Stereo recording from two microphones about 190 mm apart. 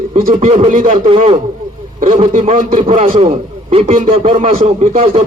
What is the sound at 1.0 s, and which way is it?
A man's voice, 30° right (ahead or behind).